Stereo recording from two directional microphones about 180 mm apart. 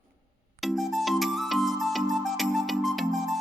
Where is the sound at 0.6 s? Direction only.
Centre (ahead or behind).